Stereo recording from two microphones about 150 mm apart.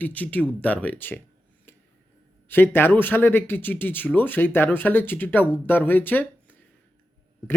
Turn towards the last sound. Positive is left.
turn(degrees=10)  # may be behind; listen again after turning